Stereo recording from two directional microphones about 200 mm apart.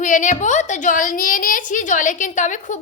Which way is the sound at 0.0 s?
40° left (ahead or behind).